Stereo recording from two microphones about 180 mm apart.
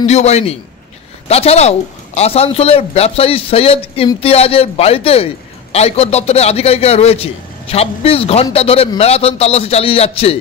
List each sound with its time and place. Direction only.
0.0 s a man's voice: 35° left (ahead or behind)